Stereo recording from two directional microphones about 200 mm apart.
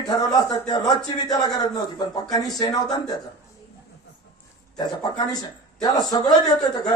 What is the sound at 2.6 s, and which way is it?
Speech, 20° left (ahead or behind).